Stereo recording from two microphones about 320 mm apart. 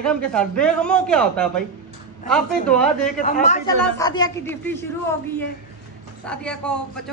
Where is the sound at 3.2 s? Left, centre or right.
Left.